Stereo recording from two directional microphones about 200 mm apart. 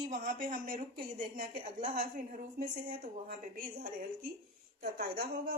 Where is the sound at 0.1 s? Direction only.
40° right (ahead or behind).